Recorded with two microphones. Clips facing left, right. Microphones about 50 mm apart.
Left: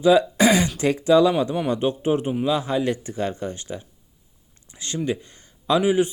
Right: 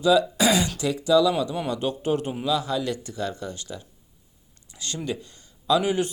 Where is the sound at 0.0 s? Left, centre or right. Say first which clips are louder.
Left 3 dB; left.